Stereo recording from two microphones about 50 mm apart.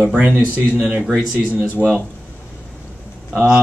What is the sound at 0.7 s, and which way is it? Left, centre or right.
Speech, right.